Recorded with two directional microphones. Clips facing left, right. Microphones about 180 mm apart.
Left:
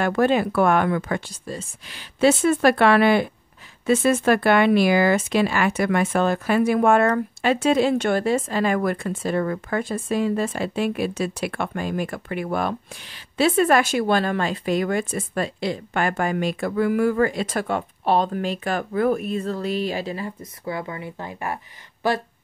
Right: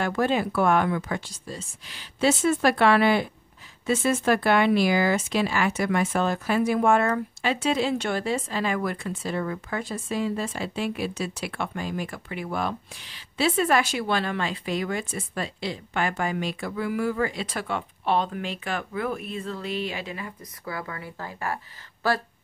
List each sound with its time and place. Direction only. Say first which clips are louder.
0.0 s speech: left 5 dB; 60° left (ahead or behind); by 22.2 s 20° left (ahead or behind)